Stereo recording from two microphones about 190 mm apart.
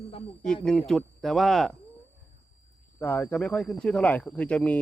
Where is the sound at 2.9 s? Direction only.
10° left (ahead or behind).